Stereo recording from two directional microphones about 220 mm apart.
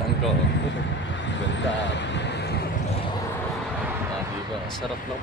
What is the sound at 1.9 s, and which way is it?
Vehicle, 50° left (ahead or behind).